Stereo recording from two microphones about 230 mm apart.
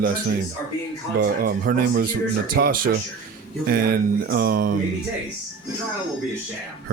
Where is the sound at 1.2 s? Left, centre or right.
Right.